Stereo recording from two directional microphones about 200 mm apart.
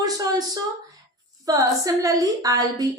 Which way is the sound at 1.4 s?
15° right (ahead or behind).